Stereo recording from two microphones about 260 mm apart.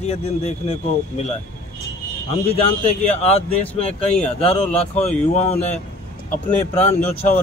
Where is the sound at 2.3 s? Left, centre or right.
Left.